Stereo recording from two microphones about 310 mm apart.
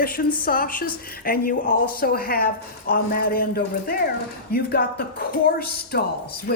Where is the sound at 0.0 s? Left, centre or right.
Left.